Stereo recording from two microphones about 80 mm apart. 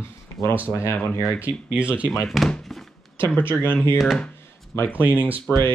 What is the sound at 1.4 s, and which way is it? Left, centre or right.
Speech, centre.